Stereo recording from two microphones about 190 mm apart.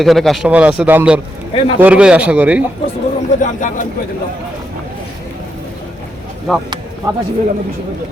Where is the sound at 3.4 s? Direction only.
45° left (ahead or behind).